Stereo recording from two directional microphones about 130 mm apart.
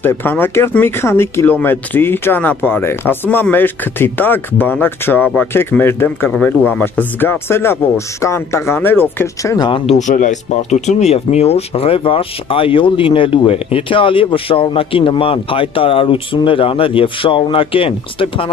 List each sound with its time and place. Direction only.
0.0 s speech: 15° left (ahead or behind)
9.7 s speech: 40° left (ahead or behind)
9.9 s speech: 70° left (ahead or behind); by 18.5 s 45° left (ahead or behind)